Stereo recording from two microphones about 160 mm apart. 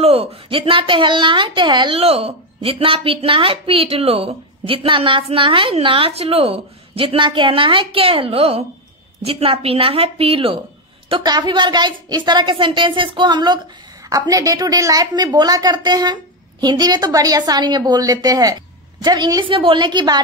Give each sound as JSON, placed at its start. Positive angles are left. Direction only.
{"t": 0.0, "sound": "a woman's voice", "side_deg": -35}